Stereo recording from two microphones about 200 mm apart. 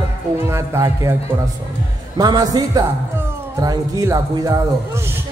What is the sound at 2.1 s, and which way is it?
Speech, 20° right (ahead or behind).